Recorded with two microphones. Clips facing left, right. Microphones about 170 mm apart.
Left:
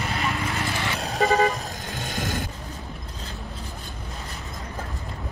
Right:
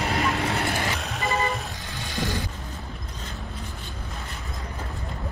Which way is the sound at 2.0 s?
50° left (ahead or behind).